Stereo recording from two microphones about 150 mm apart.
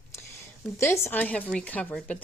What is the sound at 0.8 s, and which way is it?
Speech, 15° left (ahead or behind).